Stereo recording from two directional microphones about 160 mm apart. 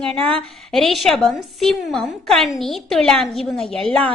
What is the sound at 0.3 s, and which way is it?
A woman's voice, 5° left (ahead or behind).